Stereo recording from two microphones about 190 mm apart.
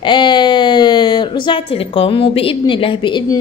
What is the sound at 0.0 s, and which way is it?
A woman's voice, 25° left (ahead or behind).